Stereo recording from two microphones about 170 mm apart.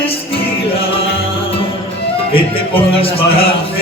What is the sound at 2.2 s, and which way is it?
Music, 35° left (ahead or behind).